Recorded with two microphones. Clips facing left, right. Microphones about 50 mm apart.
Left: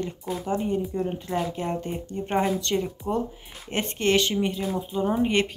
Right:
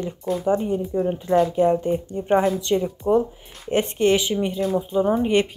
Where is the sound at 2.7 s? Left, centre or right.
Centre.